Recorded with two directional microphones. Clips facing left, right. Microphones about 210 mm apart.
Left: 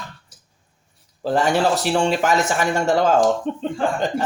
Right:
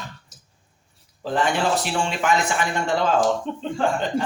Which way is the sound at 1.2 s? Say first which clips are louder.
Left 4 dB; 40° left (ahead or behind).